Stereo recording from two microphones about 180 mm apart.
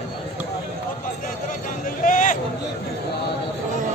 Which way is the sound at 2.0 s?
45° left (ahead or behind).